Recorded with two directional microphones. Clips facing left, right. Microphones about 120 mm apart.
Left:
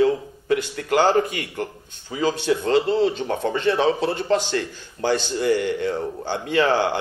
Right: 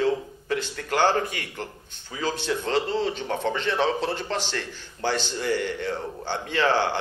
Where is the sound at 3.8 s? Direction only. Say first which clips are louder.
Left 4 dB; 15° left (ahead or behind).